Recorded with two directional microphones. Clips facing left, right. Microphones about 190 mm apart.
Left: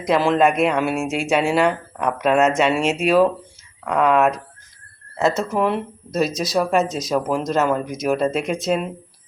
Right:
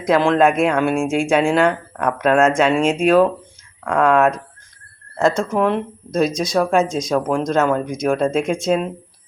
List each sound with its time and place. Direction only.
0.0 s speech: centre (ahead or behind)